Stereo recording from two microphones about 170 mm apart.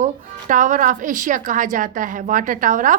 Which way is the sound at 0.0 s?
50° right (ahead or behind).